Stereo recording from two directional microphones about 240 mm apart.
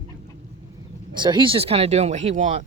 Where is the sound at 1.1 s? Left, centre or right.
Centre.